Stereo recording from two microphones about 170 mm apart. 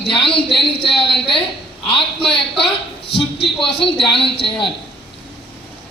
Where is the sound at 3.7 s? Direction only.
30° left (ahead or behind).